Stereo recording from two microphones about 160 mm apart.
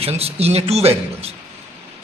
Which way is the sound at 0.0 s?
40° right (ahead or behind).